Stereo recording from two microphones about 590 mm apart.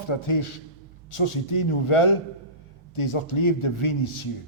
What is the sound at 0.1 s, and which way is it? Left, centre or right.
A man's voice, left.